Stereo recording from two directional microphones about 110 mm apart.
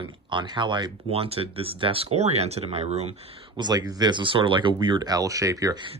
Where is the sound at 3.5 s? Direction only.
40° right (ahead or behind).